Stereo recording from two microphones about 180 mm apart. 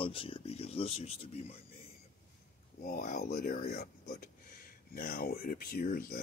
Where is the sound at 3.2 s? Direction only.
60° left (ahead or behind).